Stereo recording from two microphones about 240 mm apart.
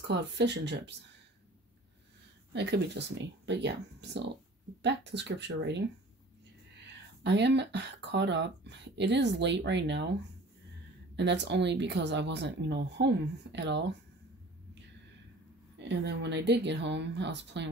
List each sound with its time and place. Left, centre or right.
0.0 s speech: right
2.5 s speech: right
7.2 s speech: right
11.1 s speech: right
15.8 s speech: right